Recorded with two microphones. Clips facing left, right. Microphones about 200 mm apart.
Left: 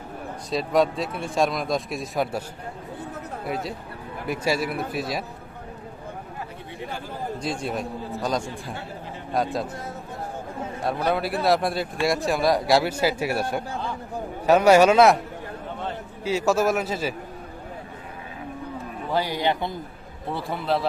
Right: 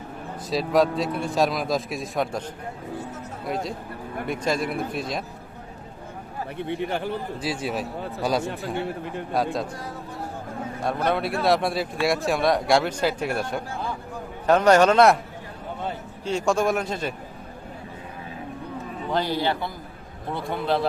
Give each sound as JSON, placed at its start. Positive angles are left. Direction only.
{"t": 0.5, "sound": "speech", "side_deg": 0}
{"t": 3.4, "sound": "speech", "side_deg": 5}
{"t": 6.6, "sound": "speech", "side_deg": -65}
{"t": 7.4, "sound": "speech", "side_deg": -5}
{"t": 10.8, "sound": "a man's voice", "side_deg": 0}
{"t": 16.2, "sound": "speech", "side_deg": 5}
{"t": 19.1, "sound": "a man's voice", "side_deg": 15}
{"t": 20.3, "sound": "speech", "side_deg": 0}